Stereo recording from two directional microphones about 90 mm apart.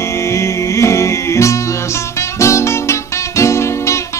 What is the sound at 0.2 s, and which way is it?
Music, 35° left (ahead or behind).